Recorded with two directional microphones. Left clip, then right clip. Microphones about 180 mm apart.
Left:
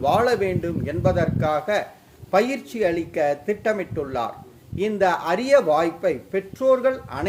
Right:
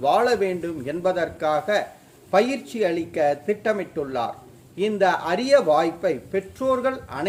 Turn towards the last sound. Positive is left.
turn(degrees=5)  # may be behind; listen again after turning